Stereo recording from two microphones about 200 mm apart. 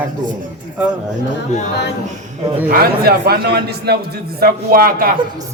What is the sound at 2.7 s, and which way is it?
A man's voice, 50° right (ahead or behind).